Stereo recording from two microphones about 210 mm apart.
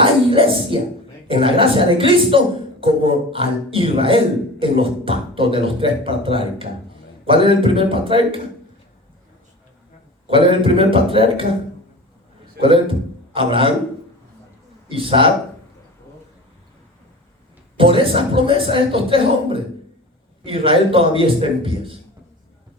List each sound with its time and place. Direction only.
0.0 s a sound: 25° right (ahead or behind)
1.3 s speech: 25° right (ahead or behind)
10.2 s speech: 25° right (ahead or behind)
12.6 s a man's voice: 25° right (ahead or behind)
14.8 s speech: 25° right (ahead or behind)
17.7 s speech: 25° right (ahead or behind)